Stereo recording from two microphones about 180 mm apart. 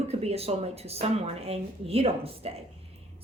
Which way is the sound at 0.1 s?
35° right (ahead or behind).